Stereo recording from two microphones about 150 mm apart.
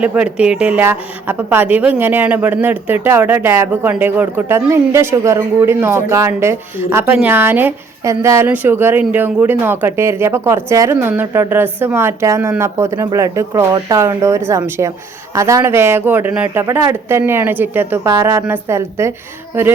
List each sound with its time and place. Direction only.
0.0 s a woman's voice: 10° right (ahead or behind)